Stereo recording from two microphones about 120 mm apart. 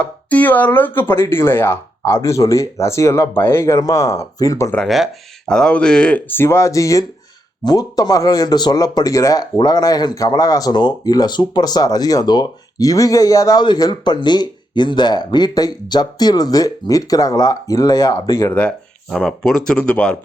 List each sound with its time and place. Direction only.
0.0 s speech: 15° left (ahead or behind)
5.5 s speech: 5° left (ahead or behind); by 18.5 s 25° left (ahead or behind)
19.1 s speech: 5° left (ahead or behind)